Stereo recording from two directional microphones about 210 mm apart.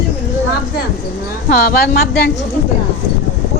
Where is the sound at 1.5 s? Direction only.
45° left (ahead or behind).